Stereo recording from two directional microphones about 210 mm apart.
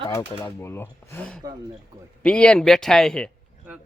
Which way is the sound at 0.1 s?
15° left (ahead or behind).